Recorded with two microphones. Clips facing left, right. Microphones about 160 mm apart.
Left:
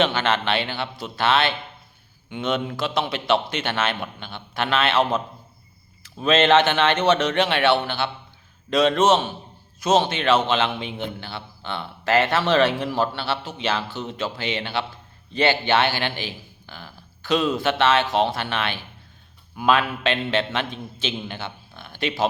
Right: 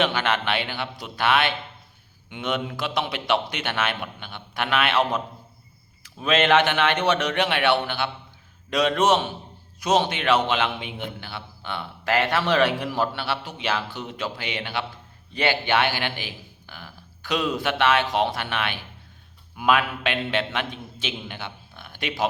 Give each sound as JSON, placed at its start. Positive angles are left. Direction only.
{"t": 0.1, "sound": "a man's voice", "side_deg": -15}
{"t": 2.7, "sound": "a man's voice", "side_deg": -15}
{"t": 6.5, "sound": "a man's voice", "side_deg": -10}
{"t": 15.4, "sound": "speech", "side_deg": 25}
{"t": 15.7, "sound": "a man's voice", "side_deg": -15}